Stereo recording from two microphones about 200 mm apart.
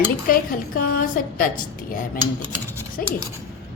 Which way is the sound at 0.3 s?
45° left (ahead or behind).